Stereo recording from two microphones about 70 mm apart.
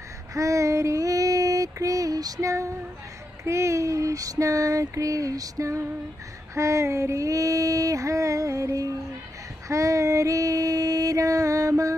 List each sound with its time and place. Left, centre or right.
0.3 s child singing: right
3.4 s a sound: right
9.7 s female singing: right